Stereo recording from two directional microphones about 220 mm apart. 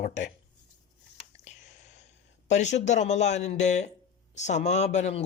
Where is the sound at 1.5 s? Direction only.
30° left (ahead or behind).